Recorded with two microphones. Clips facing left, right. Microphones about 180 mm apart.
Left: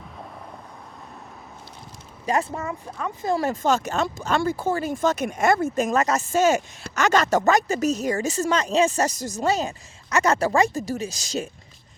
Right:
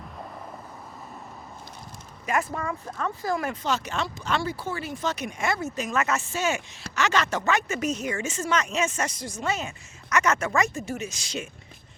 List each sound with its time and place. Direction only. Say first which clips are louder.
2.2 s speech: left 3 dB; 30° left (ahead or behind)
3.3 s speech: left 5 dB; 35° left (ahead or behind)
3.6 s speech: left 6 dB; 45° left (ahead or behind)